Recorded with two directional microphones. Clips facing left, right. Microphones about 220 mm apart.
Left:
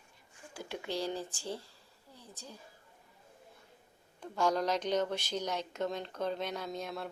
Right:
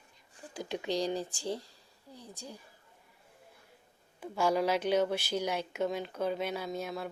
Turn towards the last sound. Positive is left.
turn(degrees=-5)  # may be behind; listen again after turning